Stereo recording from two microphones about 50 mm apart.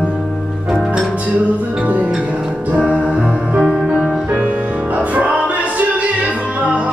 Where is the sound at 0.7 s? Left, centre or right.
Centre.